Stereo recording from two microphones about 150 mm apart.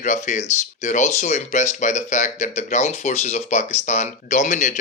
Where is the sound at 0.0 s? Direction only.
55° left (ahead or behind).